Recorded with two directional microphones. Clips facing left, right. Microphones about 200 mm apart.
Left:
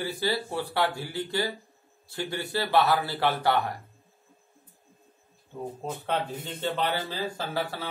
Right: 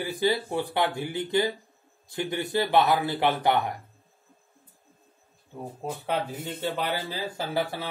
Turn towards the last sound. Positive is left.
turn(degrees=-15)  # may be behind; listen again after turning